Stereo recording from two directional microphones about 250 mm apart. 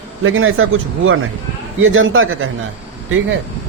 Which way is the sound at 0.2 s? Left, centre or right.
Right.